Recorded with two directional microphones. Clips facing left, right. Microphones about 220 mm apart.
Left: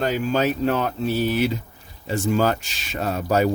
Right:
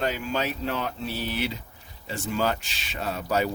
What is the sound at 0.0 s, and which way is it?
Speech, 40° left (ahead or behind).